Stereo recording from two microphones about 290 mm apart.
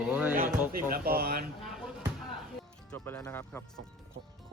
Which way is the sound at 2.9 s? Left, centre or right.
Centre.